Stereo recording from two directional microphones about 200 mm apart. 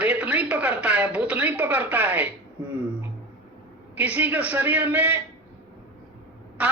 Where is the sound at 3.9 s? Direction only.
10° right (ahead or behind).